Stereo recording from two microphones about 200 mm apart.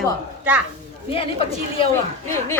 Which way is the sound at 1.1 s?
30° left (ahead or behind).